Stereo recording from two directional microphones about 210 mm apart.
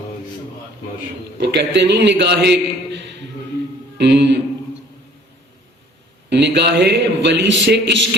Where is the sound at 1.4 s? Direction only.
55° right (ahead or behind).